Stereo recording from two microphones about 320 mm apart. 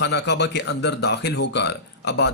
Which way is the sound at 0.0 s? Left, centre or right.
Left.